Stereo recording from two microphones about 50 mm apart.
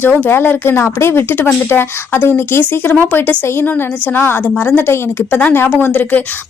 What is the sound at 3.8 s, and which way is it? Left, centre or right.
Speech, left.